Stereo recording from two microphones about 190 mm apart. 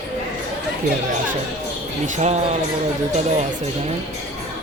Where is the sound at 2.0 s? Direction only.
35° right (ahead or behind).